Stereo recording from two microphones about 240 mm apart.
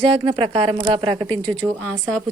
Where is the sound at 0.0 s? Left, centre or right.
Right.